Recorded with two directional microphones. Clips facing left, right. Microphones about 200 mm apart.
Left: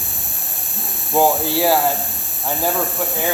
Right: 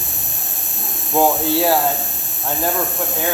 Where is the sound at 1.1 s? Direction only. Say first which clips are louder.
Even; centre (ahead or behind).